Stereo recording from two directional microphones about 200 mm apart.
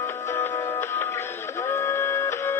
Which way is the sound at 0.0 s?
10° left (ahead or behind).